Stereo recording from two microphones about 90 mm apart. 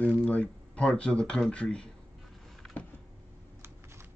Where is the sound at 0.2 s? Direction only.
15° left (ahead or behind).